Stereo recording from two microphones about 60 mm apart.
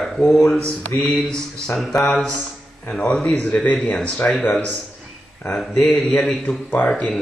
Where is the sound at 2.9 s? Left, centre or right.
Centre; by 4.4 s left.